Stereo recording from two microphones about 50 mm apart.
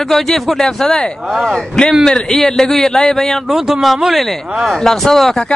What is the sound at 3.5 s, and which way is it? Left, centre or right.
A man's voice, centre.